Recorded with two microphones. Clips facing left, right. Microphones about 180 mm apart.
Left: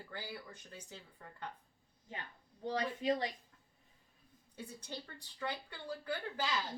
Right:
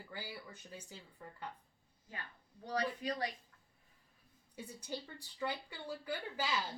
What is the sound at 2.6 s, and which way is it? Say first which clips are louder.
Speech: left 3 dB; 25° left (ahead or behind).